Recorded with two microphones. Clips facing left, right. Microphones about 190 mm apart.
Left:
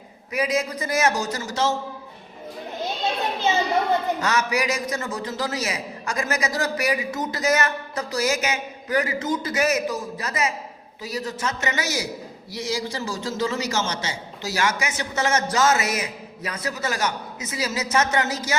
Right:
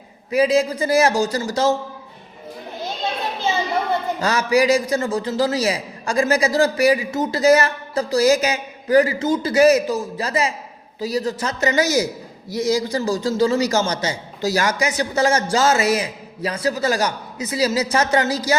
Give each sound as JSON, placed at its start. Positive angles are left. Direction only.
{"t": 0.3, "sound": "a man's voice", "side_deg": -30}
{"t": 4.2, "sound": "a man's voice", "side_deg": -30}